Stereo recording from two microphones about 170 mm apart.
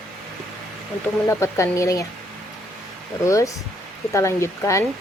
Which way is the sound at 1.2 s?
15° left (ahead or behind).